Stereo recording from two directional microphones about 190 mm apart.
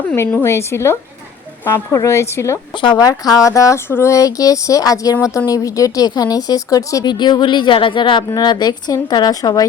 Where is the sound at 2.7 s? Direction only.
25° left (ahead or behind).